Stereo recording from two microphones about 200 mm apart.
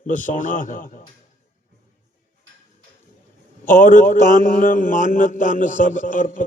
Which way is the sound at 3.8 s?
40° left (ahead or behind).